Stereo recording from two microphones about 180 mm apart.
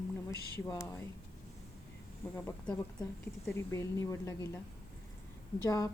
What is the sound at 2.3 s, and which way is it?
A woman's voice, 15° left (ahead or behind).